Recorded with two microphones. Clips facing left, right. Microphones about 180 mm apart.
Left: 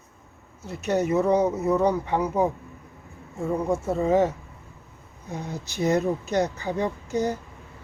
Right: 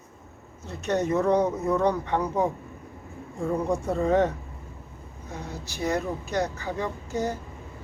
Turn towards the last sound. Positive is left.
turn(degrees=15)  # may be behind; listen again after turning